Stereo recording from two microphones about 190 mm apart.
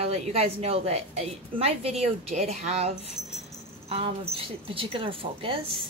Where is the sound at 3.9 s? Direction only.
30° right (ahead or behind).